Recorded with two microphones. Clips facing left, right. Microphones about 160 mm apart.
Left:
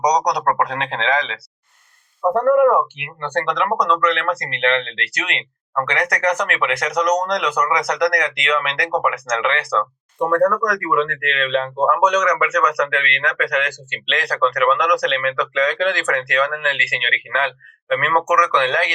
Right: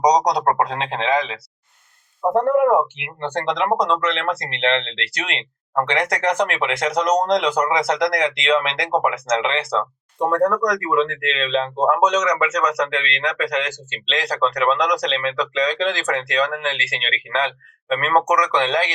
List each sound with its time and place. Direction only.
0.0 s speech: 30° right (ahead or behind)